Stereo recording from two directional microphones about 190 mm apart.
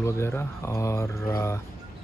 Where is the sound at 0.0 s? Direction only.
15° left (ahead or behind).